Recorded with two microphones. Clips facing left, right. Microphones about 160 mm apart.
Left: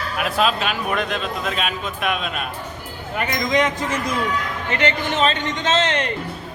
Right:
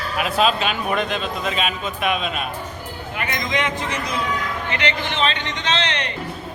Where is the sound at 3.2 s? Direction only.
40° left (ahead or behind).